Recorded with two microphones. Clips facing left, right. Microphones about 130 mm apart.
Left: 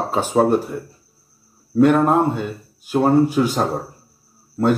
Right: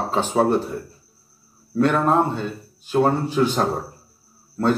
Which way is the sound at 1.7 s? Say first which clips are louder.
Left 4 dB; 10° left (ahead or behind).